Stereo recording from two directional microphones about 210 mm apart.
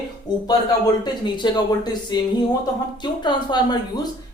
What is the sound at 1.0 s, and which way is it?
Speech, 20° left (ahead or behind).